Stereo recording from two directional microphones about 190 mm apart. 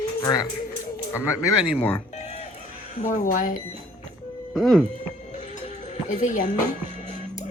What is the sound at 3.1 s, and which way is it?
Speech, 45° left (ahead or behind).